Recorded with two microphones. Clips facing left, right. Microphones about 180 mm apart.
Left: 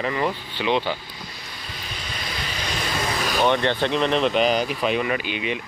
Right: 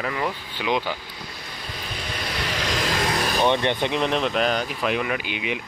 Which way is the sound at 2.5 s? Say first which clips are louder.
Right 4 dB; 90° right.